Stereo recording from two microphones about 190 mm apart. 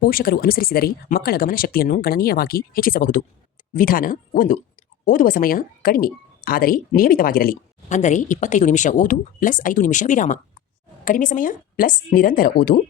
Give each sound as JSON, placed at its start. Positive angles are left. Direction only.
{"t": 0.0, "sound": "speech", "side_deg": 50}